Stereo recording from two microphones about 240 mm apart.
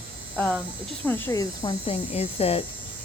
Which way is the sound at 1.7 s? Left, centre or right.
Left.